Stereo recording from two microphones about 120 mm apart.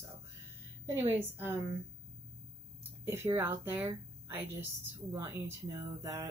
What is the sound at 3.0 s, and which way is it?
Speech, 20° right (ahead or behind).